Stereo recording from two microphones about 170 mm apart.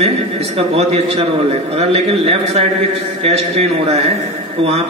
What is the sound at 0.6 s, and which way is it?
A man's voice, 35° right (ahead or behind).